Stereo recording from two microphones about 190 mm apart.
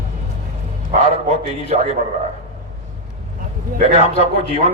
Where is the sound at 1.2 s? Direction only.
40° right (ahead or behind).